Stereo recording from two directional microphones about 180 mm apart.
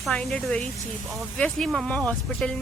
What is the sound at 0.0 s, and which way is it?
Speech, 5° left (ahead or behind).